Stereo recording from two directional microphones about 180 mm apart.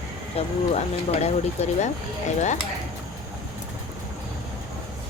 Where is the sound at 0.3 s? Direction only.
35° left (ahead or behind).